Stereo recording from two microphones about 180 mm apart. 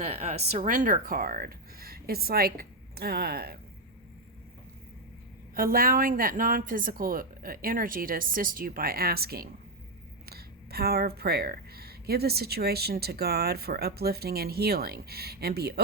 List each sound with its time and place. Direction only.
0.0 s speech: 35° right (ahead or behind); by 3.6 s 60° right (ahead or behind)
5.5 s speech: 55° right (ahead or behind)